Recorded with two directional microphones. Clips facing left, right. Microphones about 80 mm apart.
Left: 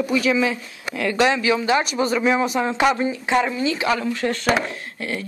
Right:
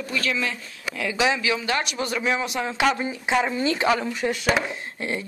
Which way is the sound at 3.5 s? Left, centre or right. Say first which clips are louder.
Left 1 dB; right.